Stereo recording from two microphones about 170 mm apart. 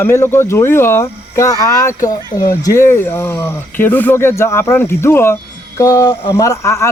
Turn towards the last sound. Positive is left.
turn(degrees=15)  # may be behind; listen again after turning